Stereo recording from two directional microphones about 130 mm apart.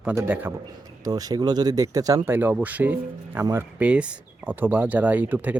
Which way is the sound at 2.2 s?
15° right (ahead or behind).